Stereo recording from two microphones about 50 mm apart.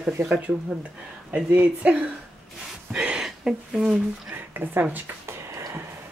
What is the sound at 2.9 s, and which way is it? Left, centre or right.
Speech, centre.